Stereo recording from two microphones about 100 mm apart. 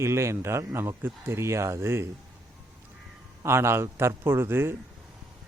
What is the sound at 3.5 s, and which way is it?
Speech, 25° right (ahead or behind).